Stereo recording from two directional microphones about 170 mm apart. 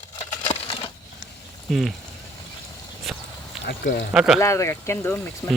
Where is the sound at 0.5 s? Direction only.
35° left (ahead or behind).